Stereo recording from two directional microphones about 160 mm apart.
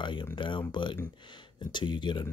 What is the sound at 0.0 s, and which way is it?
Speech, 30° left (ahead or behind).